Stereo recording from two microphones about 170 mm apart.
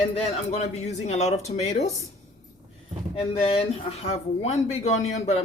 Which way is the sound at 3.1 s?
35° left (ahead or behind).